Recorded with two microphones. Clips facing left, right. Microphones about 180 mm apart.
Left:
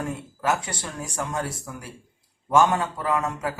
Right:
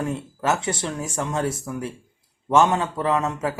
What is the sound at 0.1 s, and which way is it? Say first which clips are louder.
A man's voice: right 2 dB; 25° right (ahead or behind).